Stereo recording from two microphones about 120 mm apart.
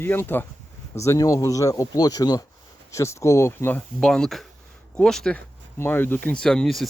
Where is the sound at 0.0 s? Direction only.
15° left (ahead or behind).